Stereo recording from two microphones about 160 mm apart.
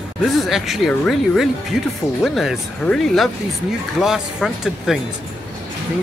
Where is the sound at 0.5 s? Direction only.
Centre (ahead or behind).